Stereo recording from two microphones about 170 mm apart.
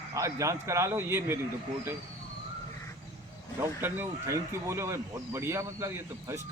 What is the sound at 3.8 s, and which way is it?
Speech, 10° right (ahead or behind).